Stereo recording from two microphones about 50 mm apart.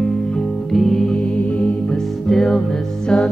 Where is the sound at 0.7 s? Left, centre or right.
Centre.